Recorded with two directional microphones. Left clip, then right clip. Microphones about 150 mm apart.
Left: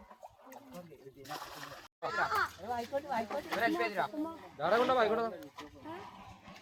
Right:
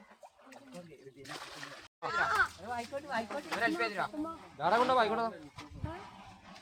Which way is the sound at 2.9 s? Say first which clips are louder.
Left 2 dB; 40° right (ahead or behind).